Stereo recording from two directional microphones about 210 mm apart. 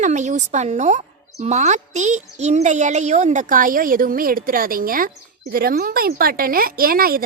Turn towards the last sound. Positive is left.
turn(degrees=-45)  # may be behind; listen again after turning